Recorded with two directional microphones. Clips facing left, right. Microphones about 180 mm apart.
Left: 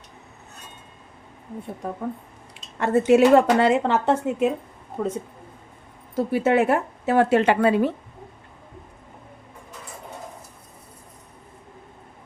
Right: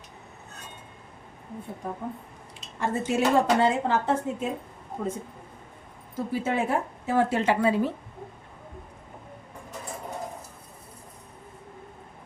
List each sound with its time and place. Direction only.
2.7 s a woman's voice: 65° left (ahead or behind)
6.1 s a woman's voice: 70° left (ahead or behind)